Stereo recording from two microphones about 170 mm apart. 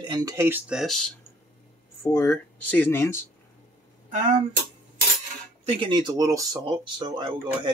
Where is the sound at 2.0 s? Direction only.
15° left (ahead or behind).